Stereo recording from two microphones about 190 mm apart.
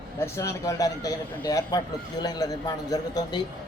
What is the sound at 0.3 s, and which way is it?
A woman's voice, 15° left (ahead or behind).